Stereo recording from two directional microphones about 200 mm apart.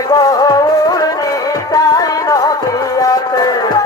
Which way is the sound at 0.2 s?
20° left (ahead or behind).